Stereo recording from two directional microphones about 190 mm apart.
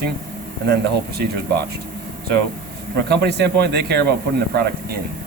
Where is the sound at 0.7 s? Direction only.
60° right (ahead or behind).